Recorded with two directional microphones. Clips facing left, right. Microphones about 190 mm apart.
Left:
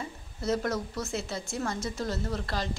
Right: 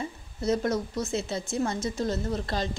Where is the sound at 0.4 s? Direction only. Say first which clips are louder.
Right 3 dB; 20° right (ahead or behind).